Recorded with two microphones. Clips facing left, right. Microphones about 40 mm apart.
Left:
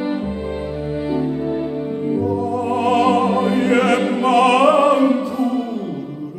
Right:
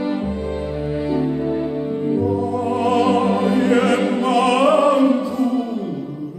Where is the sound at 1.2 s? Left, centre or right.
Centre.